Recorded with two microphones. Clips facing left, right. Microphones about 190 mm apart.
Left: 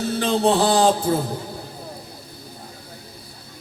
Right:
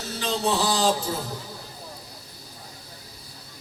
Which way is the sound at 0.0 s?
55° left (ahead or behind).